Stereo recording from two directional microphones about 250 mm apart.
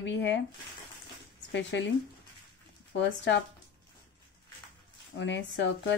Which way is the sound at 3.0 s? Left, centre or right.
Left.